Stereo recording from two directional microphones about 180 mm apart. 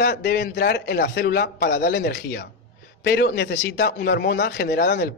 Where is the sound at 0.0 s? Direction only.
65° left (ahead or behind).